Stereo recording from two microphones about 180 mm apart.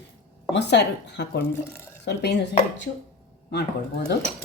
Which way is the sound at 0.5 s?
70° left (ahead or behind).